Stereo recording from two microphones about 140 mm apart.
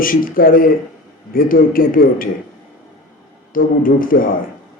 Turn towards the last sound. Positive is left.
turn(degrees=90)